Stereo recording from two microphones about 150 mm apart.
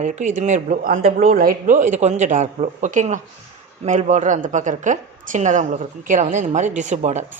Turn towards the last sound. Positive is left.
turn(degrees=-50)  # may be behind; listen again after turning